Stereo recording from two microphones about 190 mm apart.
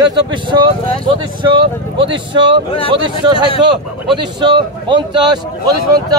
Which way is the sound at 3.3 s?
30° left (ahead or behind).